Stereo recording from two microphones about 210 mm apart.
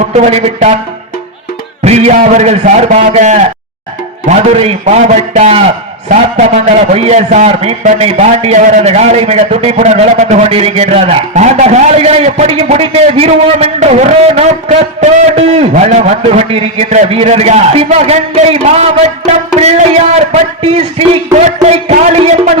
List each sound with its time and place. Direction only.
0.1 s a man's voice: 30° right (ahead or behind)
1.8 s a man's voice: 30° right (ahead or behind)